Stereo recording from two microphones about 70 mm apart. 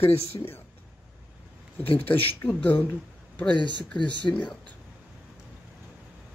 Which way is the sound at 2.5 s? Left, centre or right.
Left.